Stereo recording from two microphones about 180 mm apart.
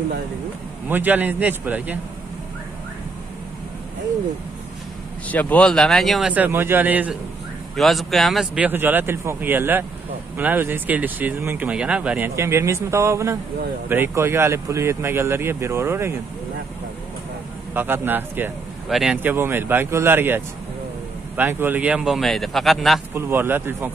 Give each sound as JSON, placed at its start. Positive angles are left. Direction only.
{"t": 0.8, "sound": "speech", "side_deg": -10}
{"t": 5.3, "sound": "speech", "side_deg": 10}
{"t": 17.7, "sound": "speech", "side_deg": -10}
{"t": 23.1, "sound": "speech", "side_deg": -10}